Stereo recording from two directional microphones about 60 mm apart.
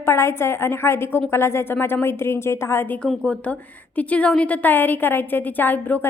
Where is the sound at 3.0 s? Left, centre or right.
Centre.